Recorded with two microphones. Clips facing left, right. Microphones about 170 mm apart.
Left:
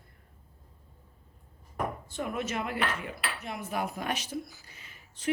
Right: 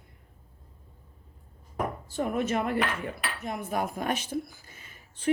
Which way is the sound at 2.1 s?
45° right (ahead or behind).